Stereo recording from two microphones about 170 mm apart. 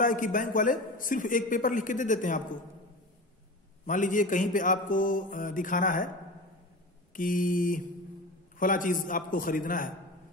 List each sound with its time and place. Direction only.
0.0 s speech: 50° left (ahead or behind)
3.8 s speech: 50° left (ahead or behind)
7.2 s speech: 50° left (ahead or behind)